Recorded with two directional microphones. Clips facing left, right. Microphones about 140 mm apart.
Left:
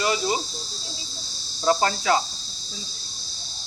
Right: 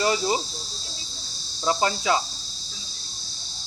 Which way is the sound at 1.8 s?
20° right (ahead or behind).